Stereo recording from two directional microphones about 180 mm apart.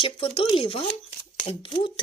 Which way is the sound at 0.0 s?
30° left (ahead or behind).